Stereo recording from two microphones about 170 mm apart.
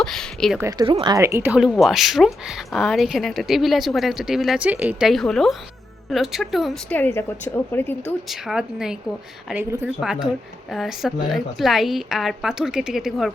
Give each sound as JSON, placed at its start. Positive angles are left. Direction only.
{"t": 0.0, "sound": "speech", "side_deg": 5}
{"t": 0.9, "sound": "speech", "side_deg": -30}
{"t": 1.1, "sound": "speech", "side_deg": -15}
{"t": 6.9, "sound": "speech", "side_deg": 10}
{"t": 8.3, "sound": "speech", "side_deg": -5}